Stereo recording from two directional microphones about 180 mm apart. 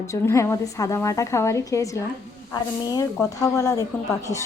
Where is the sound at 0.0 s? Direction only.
15° left (ahead or behind).